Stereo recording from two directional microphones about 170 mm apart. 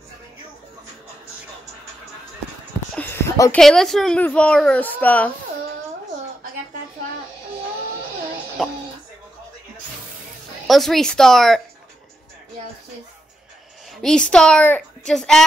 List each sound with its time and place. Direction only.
3.0 s a sound: 15° left (ahead or behind)
3.5 s a child's voice: centre (ahead or behind)
8.6 s music: centre (ahead or behind)
10.7 s a child's voice: centre (ahead or behind)
14.3 s a child's voice: 5° left (ahead or behind)